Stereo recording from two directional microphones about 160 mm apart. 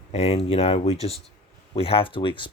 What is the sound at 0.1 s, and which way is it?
Speech, 40° left (ahead or behind).